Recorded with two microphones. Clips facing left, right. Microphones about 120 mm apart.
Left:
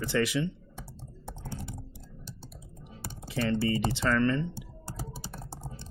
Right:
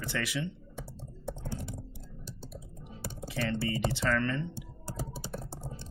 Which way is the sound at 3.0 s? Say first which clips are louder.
Left 3 dB; 30° left (ahead or behind).